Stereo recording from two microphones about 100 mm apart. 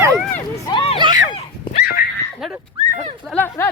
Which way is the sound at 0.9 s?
50° right (ahead or behind).